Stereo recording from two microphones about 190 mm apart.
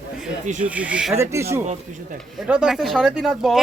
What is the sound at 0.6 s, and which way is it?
Speech, 5° right (ahead or behind).